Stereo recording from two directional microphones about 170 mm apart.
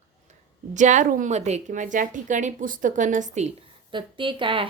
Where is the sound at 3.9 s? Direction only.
30° right (ahead or behind).